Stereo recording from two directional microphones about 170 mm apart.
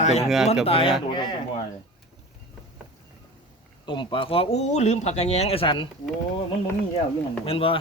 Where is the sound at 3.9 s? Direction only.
30° left (ahead or behind).